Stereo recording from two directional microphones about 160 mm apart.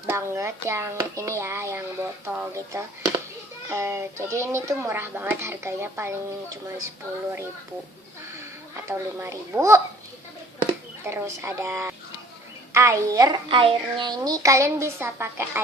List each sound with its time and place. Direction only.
0.1 s speech: 15° right (ahead or behind)
8.7 s speech: 15° right (ahead or behind)
11.0 s a woman's voice: 15° right (ahead or behind)